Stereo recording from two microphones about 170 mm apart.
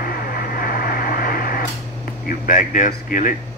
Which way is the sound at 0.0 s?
60° left (ahead or behind).